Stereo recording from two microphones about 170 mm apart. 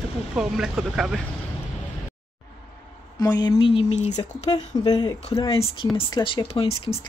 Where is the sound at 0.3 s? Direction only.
5° right (ahead or behind).